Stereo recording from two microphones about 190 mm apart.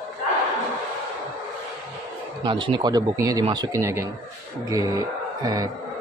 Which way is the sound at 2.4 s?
25° right (ahead or behind).